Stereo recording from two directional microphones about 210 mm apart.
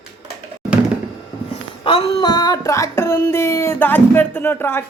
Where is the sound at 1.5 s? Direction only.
25° left (ahead or behind).